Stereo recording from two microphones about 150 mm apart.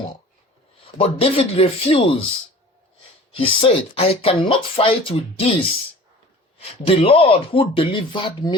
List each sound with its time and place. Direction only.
0.9 s speech: 40° left (ahead or behind)
3.3 s speech: 40° left (ahead or behind)
6.6 s speech: 40° left (ahead or behind)